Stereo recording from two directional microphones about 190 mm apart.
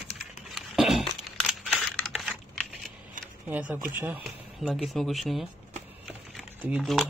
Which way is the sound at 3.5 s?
10° right (ahead or behind).